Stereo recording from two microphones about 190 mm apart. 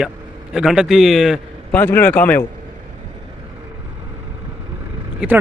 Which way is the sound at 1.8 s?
10° left (ahead or behind).